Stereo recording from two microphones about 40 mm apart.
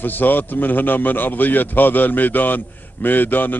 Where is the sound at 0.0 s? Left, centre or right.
Left.